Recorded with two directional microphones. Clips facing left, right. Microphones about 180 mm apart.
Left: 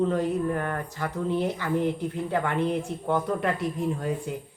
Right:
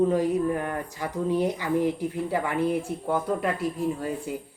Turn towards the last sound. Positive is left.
turn(degrees=-5)  # may be behind; listen again after turning